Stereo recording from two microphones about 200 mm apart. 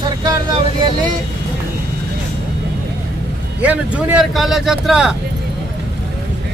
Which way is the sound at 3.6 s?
5° right (ahead or behind).